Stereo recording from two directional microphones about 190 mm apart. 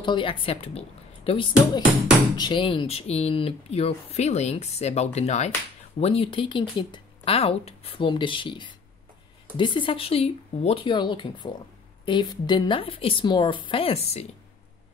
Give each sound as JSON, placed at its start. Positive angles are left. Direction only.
{"t": 0.0, "sound": "a woman's voice", "side_deg": 25}